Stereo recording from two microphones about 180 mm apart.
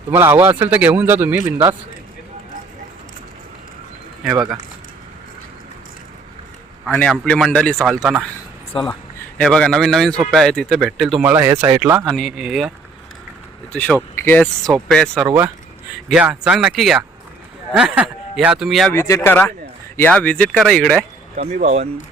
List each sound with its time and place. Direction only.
0.1 s a man's voice: 15° right (ahead or behind)
4.2 s speech: 5° right (ahead or behind)
6.8 s speech: centre (ahead or behind)
8.7 s speech: 30° left (ahead or behind)
9.4 s a man's voice: 5° left (ahead or behind); by 12.0 s 15° right (ahead or behind)
12.0 s speech: centre (ahead or behind)
13.7 s speech: 10° left (ahead or behind)
18.9 s speech: 15° left (ahead or behind)
21.3 s speech: 40° right (ahead or behind)